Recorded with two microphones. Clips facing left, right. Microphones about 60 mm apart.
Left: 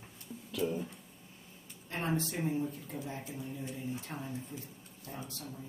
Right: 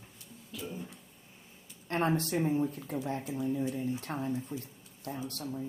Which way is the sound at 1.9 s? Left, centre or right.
Right.